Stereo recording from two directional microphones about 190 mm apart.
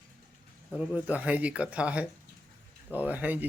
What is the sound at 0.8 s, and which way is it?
A man's voice, 5° right (ahead or behind).